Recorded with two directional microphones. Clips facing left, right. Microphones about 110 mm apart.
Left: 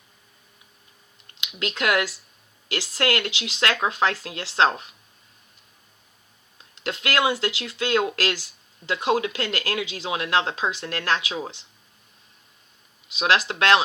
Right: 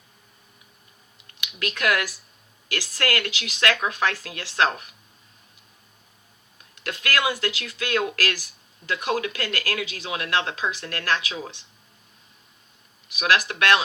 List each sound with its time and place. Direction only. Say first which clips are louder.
1.4 s speech: left 1 dB; 25° left (ahead or behind)
6.7 s speech: left 2 dB; 25° left (ahead or behind)
13.1 s speech: left 1 dB; 25° left (ahead or behind)